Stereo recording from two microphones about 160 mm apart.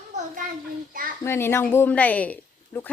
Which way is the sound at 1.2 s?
15° left (ahead or behind).